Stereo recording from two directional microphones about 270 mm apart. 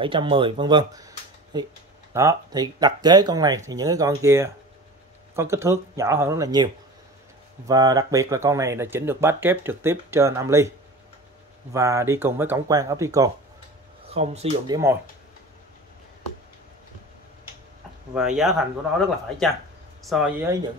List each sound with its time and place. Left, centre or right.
0.0 s speech: centre
11.7 s speech: centre
14.0 s speech: right
18.1 s speech: centre
20.0 s speech: centre